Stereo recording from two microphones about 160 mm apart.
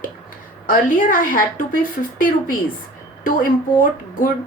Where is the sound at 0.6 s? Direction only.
60° left (ahead or behind).